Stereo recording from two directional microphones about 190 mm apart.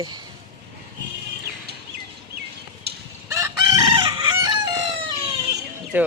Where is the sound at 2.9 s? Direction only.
55° right (ahead or behind).